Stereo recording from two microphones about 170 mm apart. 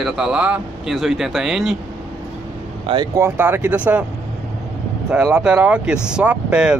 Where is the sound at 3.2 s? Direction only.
10° right (ahead or behind).